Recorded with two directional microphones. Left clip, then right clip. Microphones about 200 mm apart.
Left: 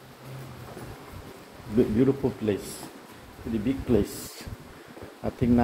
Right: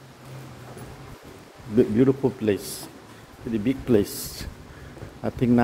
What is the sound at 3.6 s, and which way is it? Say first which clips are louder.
Speech: right 4 dB; 50° right (ahead or behind).